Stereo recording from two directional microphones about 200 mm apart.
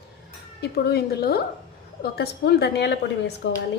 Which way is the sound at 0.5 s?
50° left (ahead or behind).